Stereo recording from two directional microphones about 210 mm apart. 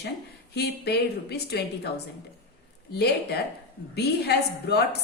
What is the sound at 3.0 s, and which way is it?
Speech, 50° left (ahead or behind).